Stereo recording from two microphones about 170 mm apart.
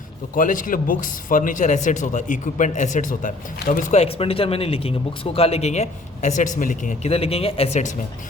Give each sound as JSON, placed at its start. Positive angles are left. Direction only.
{"t": 0.3, "sound": "speech", "side_deg": 50}